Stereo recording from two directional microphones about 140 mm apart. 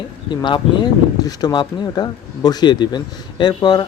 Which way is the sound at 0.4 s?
35° left (ahead or behind).